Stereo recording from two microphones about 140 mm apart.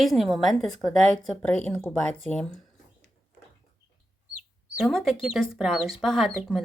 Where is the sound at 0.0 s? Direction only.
Centre (ahead or behind).